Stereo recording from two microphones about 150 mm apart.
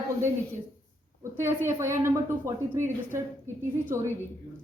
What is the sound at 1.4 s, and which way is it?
Speech, 15° right (ahead or behind).